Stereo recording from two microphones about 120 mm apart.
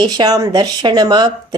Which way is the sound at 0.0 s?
35° right (ahead or behind).